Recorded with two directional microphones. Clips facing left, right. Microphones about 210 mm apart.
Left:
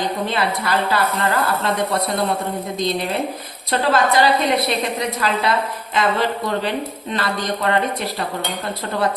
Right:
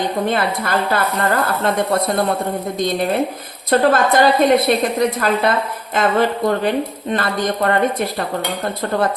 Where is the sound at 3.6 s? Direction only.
50° right (ahead or behind).